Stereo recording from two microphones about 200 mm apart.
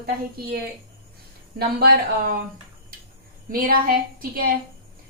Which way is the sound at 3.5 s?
45° right (ahead or behind).